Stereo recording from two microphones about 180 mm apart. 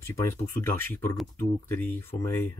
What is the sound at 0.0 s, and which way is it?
Speech, 15° left (ahead or behind).